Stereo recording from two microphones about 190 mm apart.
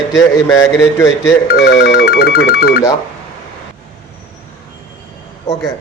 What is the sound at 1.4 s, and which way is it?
Speech, 60° left (ahead or behind).